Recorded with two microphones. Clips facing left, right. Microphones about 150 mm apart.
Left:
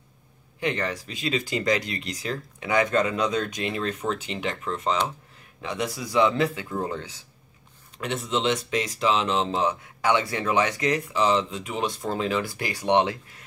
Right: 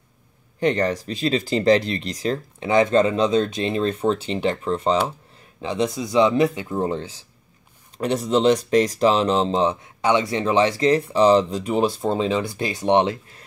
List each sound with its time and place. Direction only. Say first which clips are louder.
0.6 s speech: right 7 dB; 40° right (ahead or behind)
9.5 s speech: right 5 dB; 25° right (ahead or behind)